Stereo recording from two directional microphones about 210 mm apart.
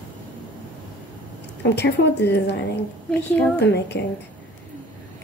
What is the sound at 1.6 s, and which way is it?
A woman's voice, 55° left (ahead or behind).